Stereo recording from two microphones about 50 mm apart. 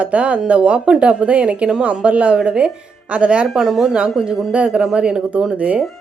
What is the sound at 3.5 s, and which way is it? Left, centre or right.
Speech, centre.